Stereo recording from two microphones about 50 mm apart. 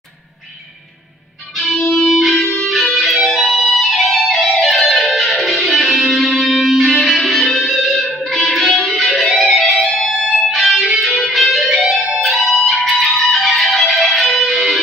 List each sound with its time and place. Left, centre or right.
1.8 s music: centre
2.0 s music: centre
9.8 s music: centre
10.5 s music: centre